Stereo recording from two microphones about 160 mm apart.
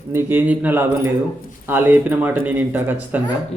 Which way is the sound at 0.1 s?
15° right (ahead or behind).